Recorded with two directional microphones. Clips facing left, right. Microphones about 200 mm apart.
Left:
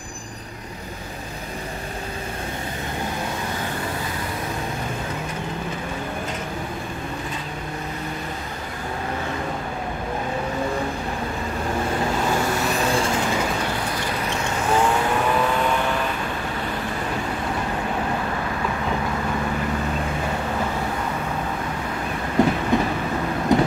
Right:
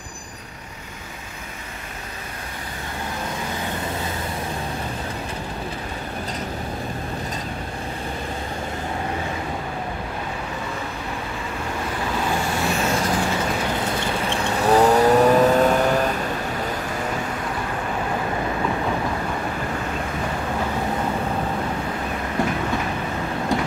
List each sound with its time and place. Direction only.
12.8 s vehicle: 30° left (ahead or behind)
13.9 s vehicle: 30° right (ahead or behind)
22.7 s train: 20° left (ahead or behind)
23.5 s vehicle: 20° left (ahead or behind)